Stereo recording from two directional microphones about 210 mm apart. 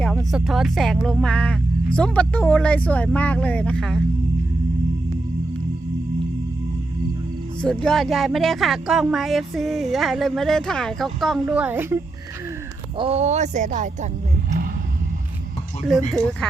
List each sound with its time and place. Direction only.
0.3 s speech: centre (ahead or behind)
7.6 s speech: 5° left (ahead or behind)
13.0 s speech: 30° right (ahead or behind)
15.9 s speech: centre (ahead or behind)